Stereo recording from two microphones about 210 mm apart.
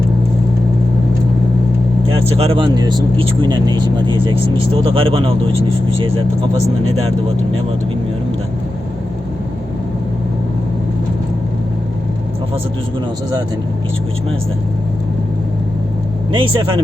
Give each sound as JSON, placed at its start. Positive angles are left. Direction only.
{"t": 2.0, "sound": "speech", "side_deg": -25}
{"t": 16.3, "sound": "speech", "side_deg": -25}